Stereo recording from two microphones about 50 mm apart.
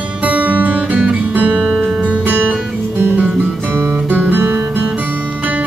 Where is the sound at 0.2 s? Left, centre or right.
Right.